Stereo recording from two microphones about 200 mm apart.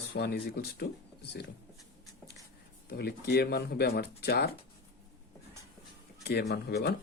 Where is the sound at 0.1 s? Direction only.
55° left (ahead or behind).